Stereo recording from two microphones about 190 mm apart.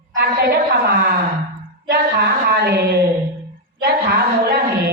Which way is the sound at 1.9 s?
60° right (ahead or behind).